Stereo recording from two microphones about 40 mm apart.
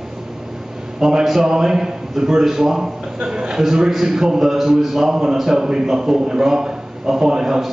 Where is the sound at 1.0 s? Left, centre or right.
Centre.